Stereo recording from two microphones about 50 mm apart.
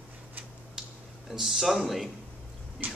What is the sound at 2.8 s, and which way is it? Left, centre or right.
Speech, right.